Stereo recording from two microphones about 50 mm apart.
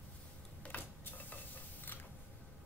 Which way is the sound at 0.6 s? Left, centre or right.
Left.